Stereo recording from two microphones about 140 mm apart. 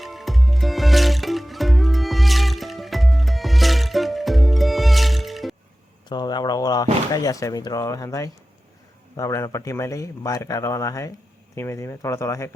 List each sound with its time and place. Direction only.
0.0 s music: centre (ahead or behind)
6.1 s speech: 30° left (ahead or behind)